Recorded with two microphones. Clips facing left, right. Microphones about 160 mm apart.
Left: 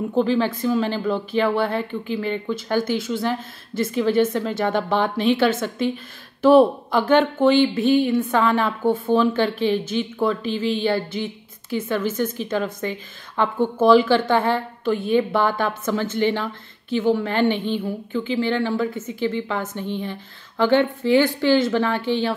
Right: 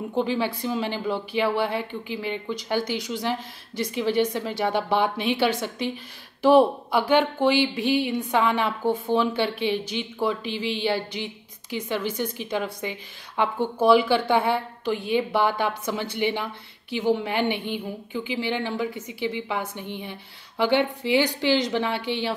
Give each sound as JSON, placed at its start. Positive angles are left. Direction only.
{"t": 0.1, "sound": "a woman's voice", "side_deg": -15}
{"t": 6.9, "sound": "a woman's voice", "side_deg": -15}